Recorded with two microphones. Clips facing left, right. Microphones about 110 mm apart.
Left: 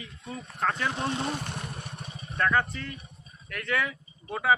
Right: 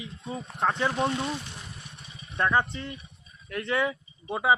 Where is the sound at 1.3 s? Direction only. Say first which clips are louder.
Left 2 dB; 55° left (ahead or behind).